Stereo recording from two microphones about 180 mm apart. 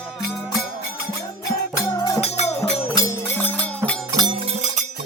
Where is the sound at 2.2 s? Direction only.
35° left (ahead or behind).